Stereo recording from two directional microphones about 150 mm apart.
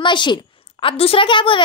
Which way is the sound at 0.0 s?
30° left (ahead or behind).